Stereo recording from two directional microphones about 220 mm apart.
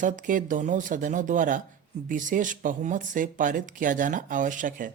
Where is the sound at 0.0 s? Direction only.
35° right (ahead or behind).